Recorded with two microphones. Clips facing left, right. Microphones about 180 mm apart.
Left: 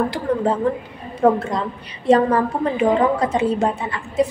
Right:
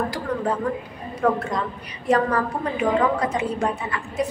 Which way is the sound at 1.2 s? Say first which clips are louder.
Left 5 dB; 25° left (ahead or behind).